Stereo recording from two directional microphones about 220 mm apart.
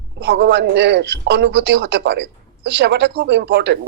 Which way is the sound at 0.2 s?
50° right (ahead or behind).